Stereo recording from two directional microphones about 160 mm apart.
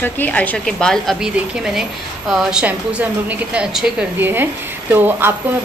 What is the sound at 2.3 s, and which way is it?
A woman's voice, 5° right (ahead or behind).